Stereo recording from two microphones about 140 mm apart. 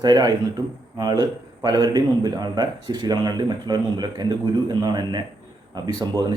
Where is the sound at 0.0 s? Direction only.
30° right (ahead or behind).